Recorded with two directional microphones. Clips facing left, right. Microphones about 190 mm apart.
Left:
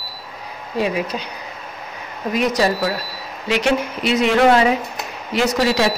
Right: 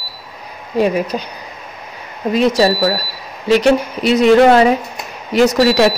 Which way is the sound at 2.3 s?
30° right (ahead or behind).